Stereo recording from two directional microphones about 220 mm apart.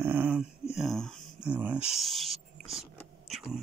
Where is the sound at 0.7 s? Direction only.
Centre (ahead or behind).